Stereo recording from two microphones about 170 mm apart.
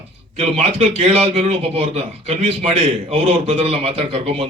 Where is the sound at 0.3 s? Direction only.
35° right (ahead or behind).